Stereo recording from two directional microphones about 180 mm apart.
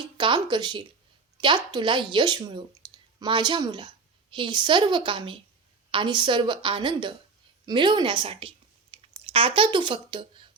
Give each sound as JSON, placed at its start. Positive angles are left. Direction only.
{"t": 0.2, "sound": "a woman's voice", "side_deg": -25}